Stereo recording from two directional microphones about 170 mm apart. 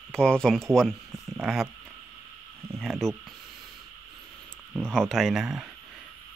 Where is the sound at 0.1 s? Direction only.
5° left (ahead or behind).